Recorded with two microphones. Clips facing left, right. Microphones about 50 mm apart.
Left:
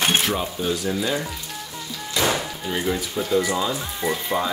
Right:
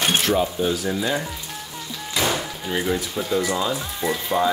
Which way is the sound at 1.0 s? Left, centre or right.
Centre.